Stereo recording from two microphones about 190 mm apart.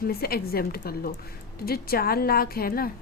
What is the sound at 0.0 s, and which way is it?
A woman's voice, 55° left (ahead or behind).